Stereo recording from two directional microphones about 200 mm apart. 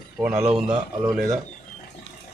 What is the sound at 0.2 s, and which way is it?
Speech, 5° right (ahead or behind).